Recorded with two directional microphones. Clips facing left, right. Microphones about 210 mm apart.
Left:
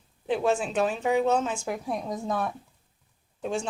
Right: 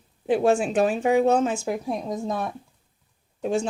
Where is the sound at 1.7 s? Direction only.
25° right (ahead or behind).